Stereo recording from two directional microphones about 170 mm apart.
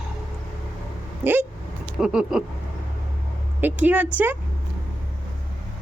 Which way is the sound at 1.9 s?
5° right (ahead or behind).